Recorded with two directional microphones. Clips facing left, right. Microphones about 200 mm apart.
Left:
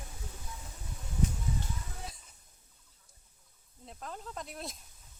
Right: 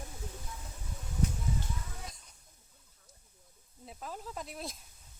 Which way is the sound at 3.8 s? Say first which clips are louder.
Right 1 dB; 5° right (ahead or behind).